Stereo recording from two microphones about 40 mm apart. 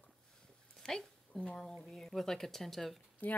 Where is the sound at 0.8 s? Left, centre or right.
Centre.